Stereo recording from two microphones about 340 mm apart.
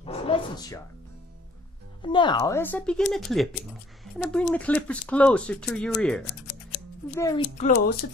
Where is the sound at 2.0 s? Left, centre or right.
Centre.